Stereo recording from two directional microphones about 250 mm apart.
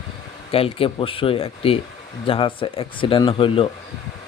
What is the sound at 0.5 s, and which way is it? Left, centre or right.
A man's voice, left.